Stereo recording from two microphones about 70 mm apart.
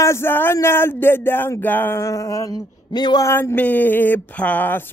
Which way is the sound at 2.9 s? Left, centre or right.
Left.